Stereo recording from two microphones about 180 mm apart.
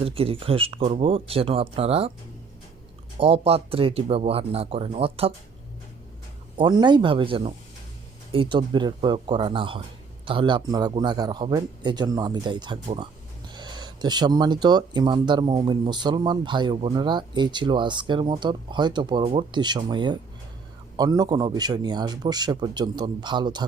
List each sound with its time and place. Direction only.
0.0 s speech: 30° right (ahead or behind)
3.2 s speech: 35° right (ahead or behind)
6.6 s speech: 25° right (ahead or behind)